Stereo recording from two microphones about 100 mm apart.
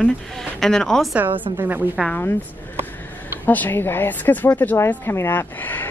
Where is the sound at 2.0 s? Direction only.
20° left (ahead or behind).